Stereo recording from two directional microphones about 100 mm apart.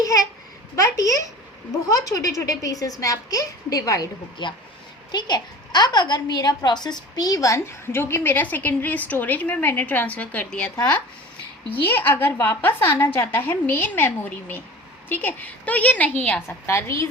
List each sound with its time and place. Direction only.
0.0 s a child's voice: 35° left (ahead or behind)
4.4 s a child's voice: 50° left (ahead or behind); by 10.7 s 15° left (ahead or behind)
11.8 s a child's voice: 20° left (ahead or behind)
16.6 s a child's voice: 30° left (ahead or behind)